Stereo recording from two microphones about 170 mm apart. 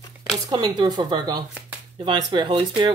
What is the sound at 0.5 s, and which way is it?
Speech, 25° right (ahead or behind).